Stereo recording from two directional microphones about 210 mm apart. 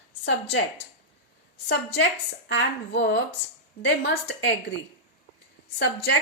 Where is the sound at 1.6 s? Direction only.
55° left (ahead or behind).